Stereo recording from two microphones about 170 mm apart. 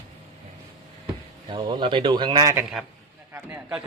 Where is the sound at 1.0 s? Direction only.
30° right (ahead or behind).